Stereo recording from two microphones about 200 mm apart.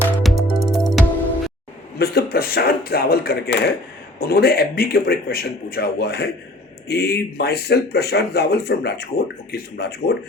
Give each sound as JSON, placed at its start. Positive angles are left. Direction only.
{"t": 0.0, "sound": "music", "side_deg": 0}
{"t": 2.0, "sound": "speech", "side_deg": 50}